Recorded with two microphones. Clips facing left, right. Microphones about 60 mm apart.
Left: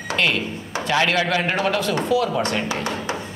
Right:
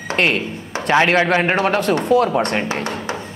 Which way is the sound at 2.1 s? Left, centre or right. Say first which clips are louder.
Right 5 dB; right.